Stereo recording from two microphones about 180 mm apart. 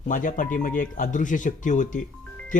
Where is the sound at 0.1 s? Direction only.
45° left (ahead or behind).